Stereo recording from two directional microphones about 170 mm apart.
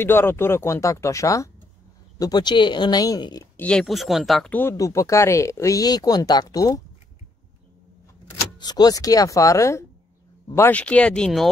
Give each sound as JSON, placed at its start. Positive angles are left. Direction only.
{"t": 0.0, "sound": "speech", "side_deg": 15}
{"t": 3.5, "sound": "speech", "side_deg": 5}
{"t": 8.5, "sound": "speech", "side_deg": 25}